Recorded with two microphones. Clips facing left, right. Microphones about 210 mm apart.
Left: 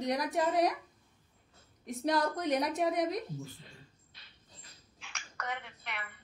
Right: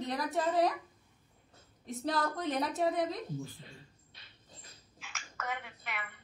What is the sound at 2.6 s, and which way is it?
Speech, 15° left (ahead or behind).